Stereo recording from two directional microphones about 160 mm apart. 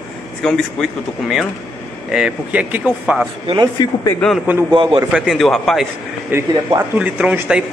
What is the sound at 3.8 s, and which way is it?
Speech, 25° left (ahead or behind).